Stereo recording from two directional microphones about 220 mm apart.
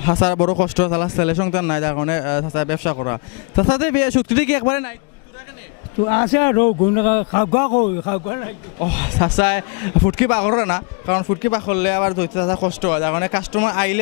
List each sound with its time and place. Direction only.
0.0 s speech: 15° left (ahead or behind)
6.0 s speech: 15° left (ahead or behind)
7.7 s a man's voice: 35° left (ahead or behind)
8.1 s speech: 15° left (ahead or behind)